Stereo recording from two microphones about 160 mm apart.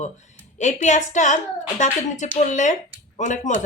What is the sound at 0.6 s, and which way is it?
Speech, 50° left (ahead or behind).